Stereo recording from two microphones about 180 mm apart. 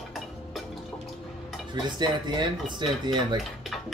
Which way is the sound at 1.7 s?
25° right (ahead or behind).